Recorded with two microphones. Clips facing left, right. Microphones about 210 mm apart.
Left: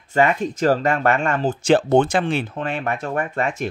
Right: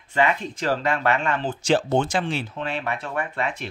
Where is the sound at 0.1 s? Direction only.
45° left (ahead or behind).